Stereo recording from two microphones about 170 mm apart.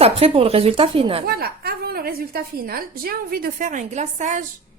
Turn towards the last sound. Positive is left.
turn(degrees=-45)  # may be behind; listen again after turning